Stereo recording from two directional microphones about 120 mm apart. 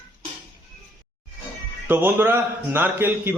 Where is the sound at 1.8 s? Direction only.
20° right (ahead or behind).